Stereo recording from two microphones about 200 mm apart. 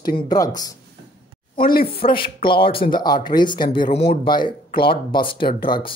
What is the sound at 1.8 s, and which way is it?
Speech, 25° left (ahead or behind).